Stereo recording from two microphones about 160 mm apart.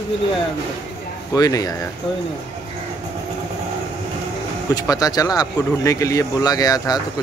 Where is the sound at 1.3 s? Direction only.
20° left (ahead or behind).